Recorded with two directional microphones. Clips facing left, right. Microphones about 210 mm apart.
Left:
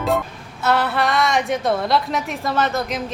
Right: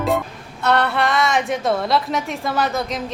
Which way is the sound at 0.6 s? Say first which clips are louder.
Right 1 dB; centre (ahead or behind).